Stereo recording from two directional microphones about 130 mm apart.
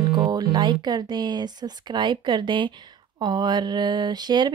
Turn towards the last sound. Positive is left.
turn(degrees=-35)  # may be behind; listen again after turning